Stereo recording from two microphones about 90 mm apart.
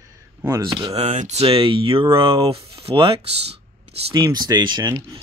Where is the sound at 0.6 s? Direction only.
60° right (ahead or behind).